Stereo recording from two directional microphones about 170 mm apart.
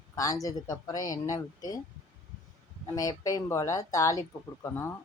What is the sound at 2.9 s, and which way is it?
A woman's voice, 20° left (ahead or behind).